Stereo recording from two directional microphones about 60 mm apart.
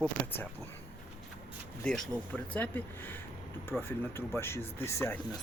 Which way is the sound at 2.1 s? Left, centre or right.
Left.